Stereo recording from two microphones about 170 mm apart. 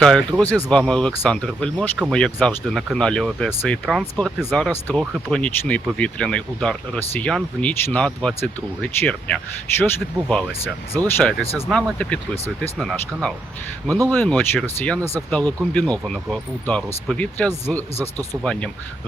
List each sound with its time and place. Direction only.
0.0 s speech: 5° left (ahead or behind)